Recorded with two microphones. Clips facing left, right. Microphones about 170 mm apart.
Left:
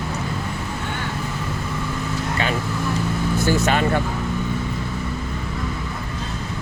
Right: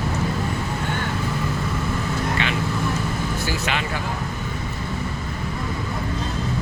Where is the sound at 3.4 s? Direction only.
45° left (ahead or behind).